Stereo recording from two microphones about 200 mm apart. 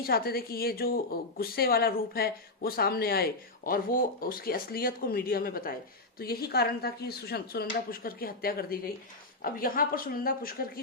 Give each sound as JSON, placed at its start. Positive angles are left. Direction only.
{"t": 0.0, "sound": "speech", "side_deg": 50}